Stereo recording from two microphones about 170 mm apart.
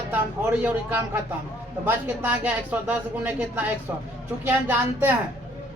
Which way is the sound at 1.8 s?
10° right (ahead or behind).